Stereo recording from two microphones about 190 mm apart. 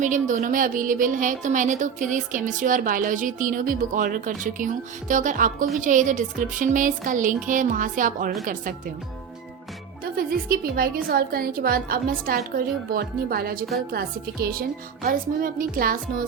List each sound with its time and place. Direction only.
0.0 s speech: 40° right (ahead or behind)
10.0 s speech: 50° right (ahead or behind)